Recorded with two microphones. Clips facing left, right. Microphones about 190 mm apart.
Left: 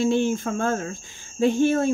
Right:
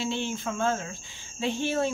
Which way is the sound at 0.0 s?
45° left (ahead or behind).